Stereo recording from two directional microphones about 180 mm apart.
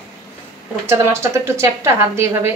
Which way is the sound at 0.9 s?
15° right (ahead or behind).